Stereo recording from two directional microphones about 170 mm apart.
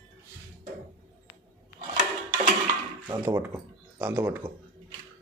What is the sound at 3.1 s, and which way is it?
Speech, 15° right (ahead or behind).